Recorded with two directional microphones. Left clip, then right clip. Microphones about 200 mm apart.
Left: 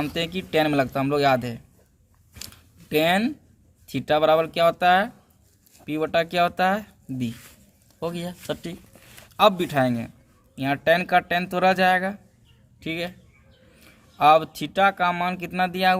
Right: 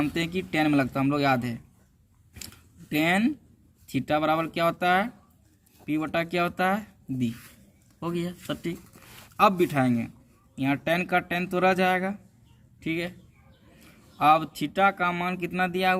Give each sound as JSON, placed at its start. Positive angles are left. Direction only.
{"t": 0.0, "sound": "speech", "side_deg": 40}
{"t": 2.9, "sound": "speech", "side_deg": 45}
{"t": 14.2, "sound": "speech", "side_deg": 40}